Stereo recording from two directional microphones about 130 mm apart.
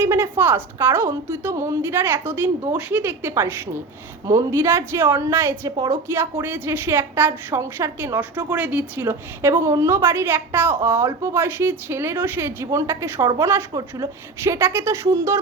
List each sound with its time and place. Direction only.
0.0 s a woman's voice: 15° right (ahead or behind)